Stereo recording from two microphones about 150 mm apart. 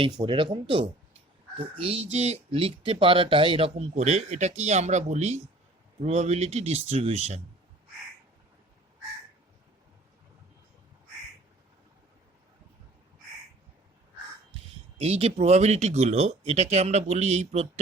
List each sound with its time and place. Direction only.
0.0 s speech: 30° right (ahead or behind); by 7.4 s 45° right (ahead or behind)
14.9 s speech: 45° right (ahead or behind)